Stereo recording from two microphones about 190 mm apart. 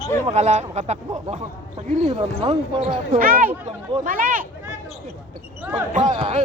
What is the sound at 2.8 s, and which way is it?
Speech, 40° right (ahead or behind).